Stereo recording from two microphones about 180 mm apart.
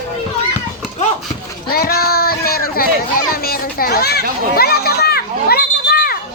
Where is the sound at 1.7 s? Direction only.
60° left (ahead or behind).